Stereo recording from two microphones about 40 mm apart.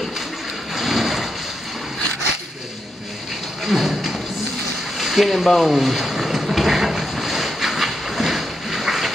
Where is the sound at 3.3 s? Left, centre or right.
Centre.